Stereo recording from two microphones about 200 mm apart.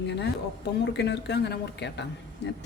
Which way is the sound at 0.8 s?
60° left (ahead or behind).